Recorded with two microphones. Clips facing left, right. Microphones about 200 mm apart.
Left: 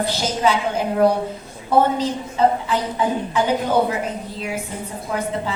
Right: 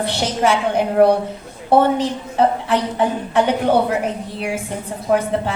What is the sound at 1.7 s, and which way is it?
A woman's voice, 75° right (ahead or behind).